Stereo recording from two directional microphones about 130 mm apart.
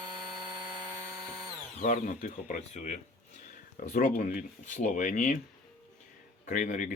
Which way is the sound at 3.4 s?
90° left.